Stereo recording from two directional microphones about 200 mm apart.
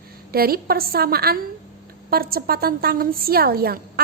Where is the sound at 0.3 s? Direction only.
50° right (ahead or behind).